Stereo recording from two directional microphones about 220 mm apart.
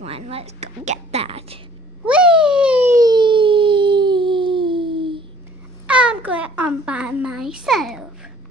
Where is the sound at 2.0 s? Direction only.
5° right (ahead or behind); by 5.3 s 20° right (ahead or behind).